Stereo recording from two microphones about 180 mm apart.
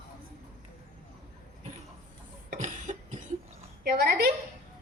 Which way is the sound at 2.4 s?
45° right (ahead or behind).